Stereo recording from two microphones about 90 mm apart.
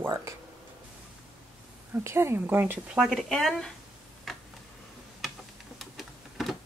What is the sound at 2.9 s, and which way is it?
Speech, centre (ahead or behind).